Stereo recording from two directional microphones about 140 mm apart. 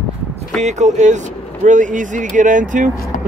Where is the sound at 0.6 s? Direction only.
55° right (ahead or behind).